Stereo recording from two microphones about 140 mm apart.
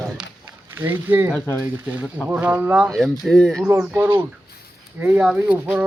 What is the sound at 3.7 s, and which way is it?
Speech, 15° right (ahead or behind).